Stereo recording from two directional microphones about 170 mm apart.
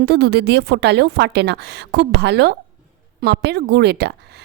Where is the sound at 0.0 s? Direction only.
75° right (ahead or behind).